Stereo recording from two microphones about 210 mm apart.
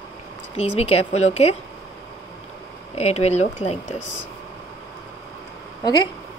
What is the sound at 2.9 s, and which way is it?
Speech, 30° left (ahead or behind).